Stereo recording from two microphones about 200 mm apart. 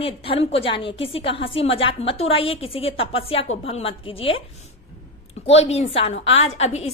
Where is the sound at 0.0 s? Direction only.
25° left (ahead or behind).